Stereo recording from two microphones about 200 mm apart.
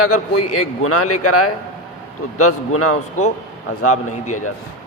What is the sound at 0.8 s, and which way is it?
Speech, 90° left.